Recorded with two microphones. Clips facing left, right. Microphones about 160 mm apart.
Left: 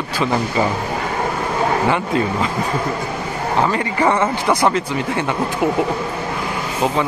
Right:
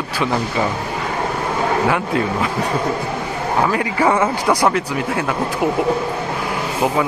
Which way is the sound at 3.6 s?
5° right (ahead or behind).